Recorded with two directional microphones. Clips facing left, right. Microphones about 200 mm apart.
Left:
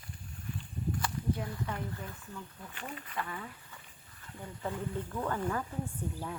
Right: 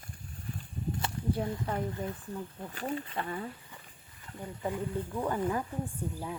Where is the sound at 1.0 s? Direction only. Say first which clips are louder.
Right 4 dB; 30° right (ahead or behind).